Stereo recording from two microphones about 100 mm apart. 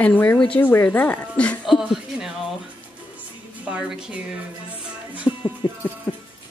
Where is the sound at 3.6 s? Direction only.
10° right (ahead or behind).